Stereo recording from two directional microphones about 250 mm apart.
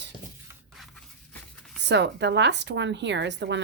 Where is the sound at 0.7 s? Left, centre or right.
Centre.